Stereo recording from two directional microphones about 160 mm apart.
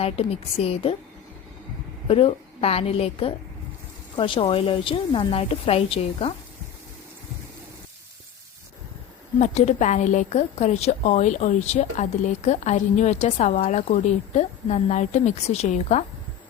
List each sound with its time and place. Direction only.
0.0 s a woman's voice: 40° left (ahead or behind)
2.0 s a woman's voice: 35° left (ahead or behind)
9.4 s a woman's voice: 45° left (ahead or behind)